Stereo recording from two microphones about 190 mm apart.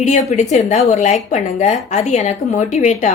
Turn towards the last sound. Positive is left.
turn(degrees=40)  # may be behind; listen again after turning